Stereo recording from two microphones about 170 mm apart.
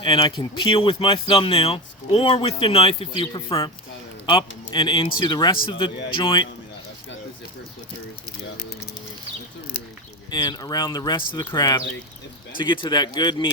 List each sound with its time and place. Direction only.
0.0 s speech: 30° left (ahead or behind)
10.3 s speech: 25° left (ahead or behind)